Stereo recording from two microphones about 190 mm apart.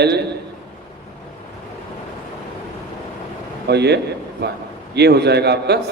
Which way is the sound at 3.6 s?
60° right (ahead or behind).